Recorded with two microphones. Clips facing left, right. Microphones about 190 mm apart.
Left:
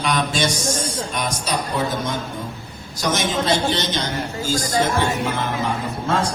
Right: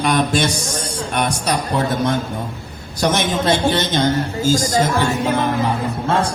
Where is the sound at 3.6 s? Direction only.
55° right (ahead or behind).